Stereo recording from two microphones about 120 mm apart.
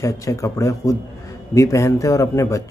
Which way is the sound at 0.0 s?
25° left (ahead or behind).